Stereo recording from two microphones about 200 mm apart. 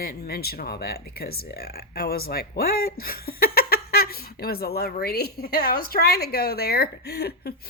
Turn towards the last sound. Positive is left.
turn(degrees=50)  # may be behind; listen again after turning